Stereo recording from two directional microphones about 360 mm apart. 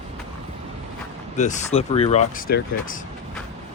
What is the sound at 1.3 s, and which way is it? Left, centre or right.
Speech, centre.